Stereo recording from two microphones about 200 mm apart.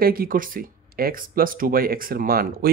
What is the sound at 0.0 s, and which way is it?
Speech, 45° right (ahead or behind).